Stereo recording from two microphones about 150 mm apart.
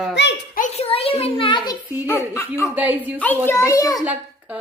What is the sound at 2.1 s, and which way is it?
Speech, 15° left (ahead or behind).